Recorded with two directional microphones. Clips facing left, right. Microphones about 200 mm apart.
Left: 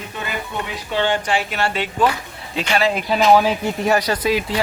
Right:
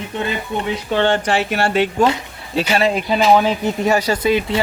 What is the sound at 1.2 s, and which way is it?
Speech, 50° right (ahead or behind).